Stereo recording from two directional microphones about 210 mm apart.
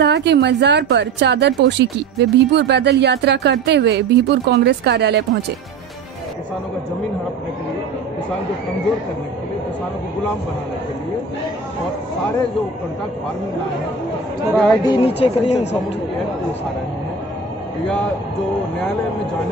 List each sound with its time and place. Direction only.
0.0 s speech: 55° right (ahead or behind)
14.5 s speech: 5° left (ahead or behind)
15.0 s speech: 30° left (ahead or behind)